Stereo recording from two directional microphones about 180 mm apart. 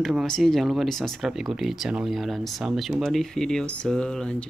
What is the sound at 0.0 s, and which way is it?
Speech, centre (ahead or behind).